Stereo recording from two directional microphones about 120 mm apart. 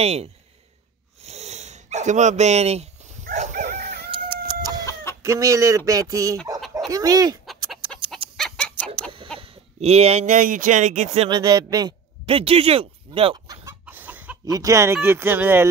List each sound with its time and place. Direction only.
0.0 s speech: 60° right (ahead or behind)
1.2 s sniff: 65° right (ahead or behind); by 3.8 s 80° right
4.1 s chicken: 40° right (ahead or behind)
5.2 s speech: 25° right (ahead or behind)
7.4 s chicken: centre (ahead or behind)
9.4 s speech: 55° right (ahead or behind); by 11.2 s 75° right (ahead or behind)
11.2 s speech: 35° right (ahead or behind)
12.3 s speech: 50° right (ahead or behind)
13.7 s chicken: 15° right (ahead or behind)
14.4 s speech: 30° right (ahead or behind)